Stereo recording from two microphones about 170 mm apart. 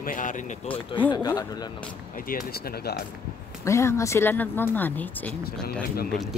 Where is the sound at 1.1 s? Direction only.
25° left (ahead or behind).